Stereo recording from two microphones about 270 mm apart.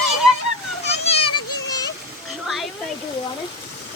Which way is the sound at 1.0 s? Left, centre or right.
Left.